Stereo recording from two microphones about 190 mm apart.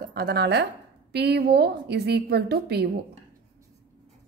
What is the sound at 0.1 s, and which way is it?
A woman's voice, 55° right (ahead or behind).